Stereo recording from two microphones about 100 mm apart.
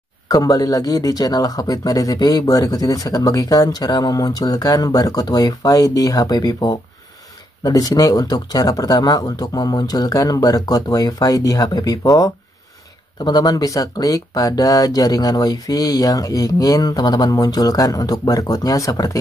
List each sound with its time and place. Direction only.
0.3 s speech: 40° left (ahead or behind)